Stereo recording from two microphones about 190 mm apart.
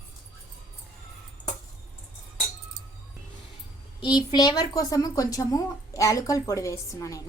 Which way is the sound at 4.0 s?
25° left (ahead or behind).